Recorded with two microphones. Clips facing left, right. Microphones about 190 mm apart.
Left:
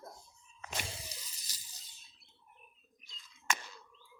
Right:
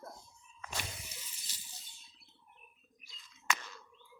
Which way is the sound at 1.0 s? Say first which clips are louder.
Left 2 dB; 40° left (ahead or behind).